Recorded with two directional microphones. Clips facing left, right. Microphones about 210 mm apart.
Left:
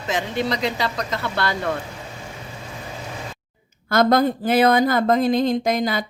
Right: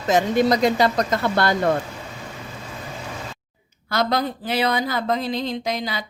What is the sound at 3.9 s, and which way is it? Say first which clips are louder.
Speech: left 6 dB; 50° left (ahead or behind).